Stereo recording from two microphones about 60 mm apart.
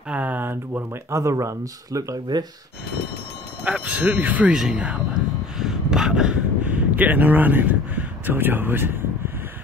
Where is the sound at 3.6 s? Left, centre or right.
Right.